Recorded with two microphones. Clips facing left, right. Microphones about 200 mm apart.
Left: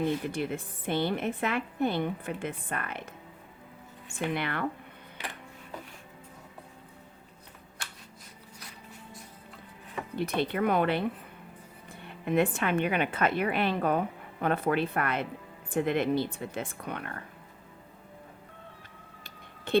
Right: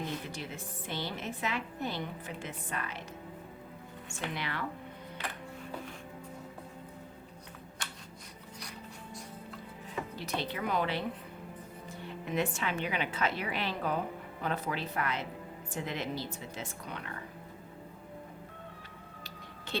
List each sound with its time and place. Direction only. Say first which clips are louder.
0.3 s a woman's voice: left 9 dB; 55° left (ahead or behind)
4.1 s a woman's voice: left 7 dB; 55° left (ahead or behind)
10.2 s a woman's voice: left 10 dB; 55° left (ahead or behind)